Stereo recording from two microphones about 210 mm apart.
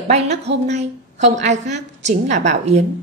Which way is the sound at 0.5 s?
55° right (ahead or behind).